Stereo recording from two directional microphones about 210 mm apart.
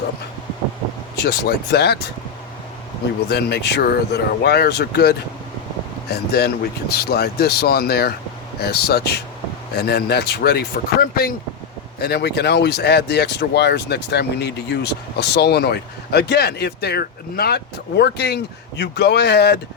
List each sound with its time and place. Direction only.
1.2 s speech: 50° left (ahead or behind)
3.2 s speech: 50° left (ahead or behind)